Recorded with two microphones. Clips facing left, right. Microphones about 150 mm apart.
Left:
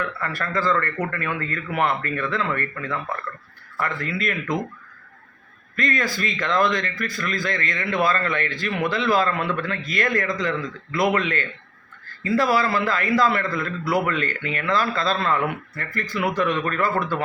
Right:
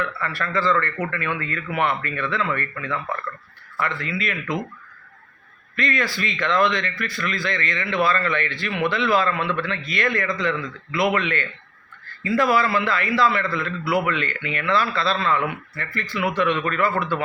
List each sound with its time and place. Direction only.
0.2 s a man's voice: 45° left (ahead or behind)
5.7 s a man's voice: 45° left (ahead or behind)